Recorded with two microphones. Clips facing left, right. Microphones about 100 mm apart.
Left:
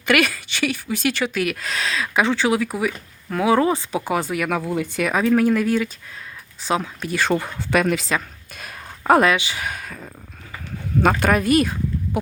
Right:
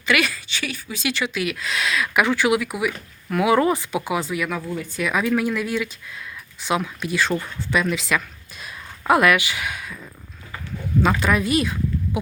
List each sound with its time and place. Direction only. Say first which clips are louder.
0.0 s speech: left 3 dB; 55° left (ahead or behind)
4.7 s speech: left 4 dB; 70° left (ahead or behind)
5.0 s speech: left 4 dB; 40° left (ahead or behind)
7.1 s speech: left 3 dB; 55° left (ahead or behind)
8.5 s a sound: left 1 dB; 50° left (ahead or behind)
9.3 s speech: right 1 dB; 30° left (ahead or behind); by 10.1 s 45° left (ahead or behind)
11.2 s speech: left 3 dB; 50° left (ahead or behind)